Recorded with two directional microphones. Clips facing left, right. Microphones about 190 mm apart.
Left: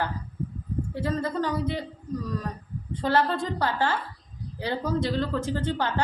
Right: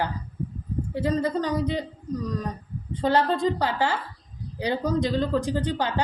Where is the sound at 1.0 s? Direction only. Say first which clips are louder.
Right 3 dB; 15° right (ahead or behind).